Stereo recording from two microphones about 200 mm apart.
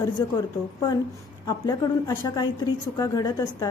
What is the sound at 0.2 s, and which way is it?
Speech, 20° left (ahead or behind).